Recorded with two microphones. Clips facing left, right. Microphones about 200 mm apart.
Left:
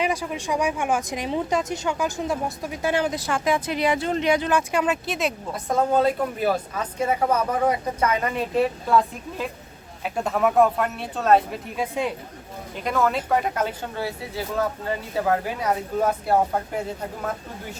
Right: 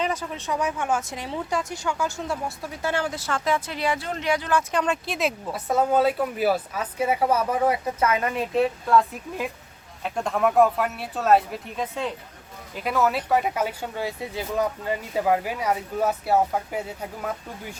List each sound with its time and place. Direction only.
0.0 s speech: 10° left (ahead or behind)
4.7 s speech: 5° left (ahead or behind)
11.8 s speech: 10° left (ahead or behind)
12.7 s speech: 5° right (ahead or behind)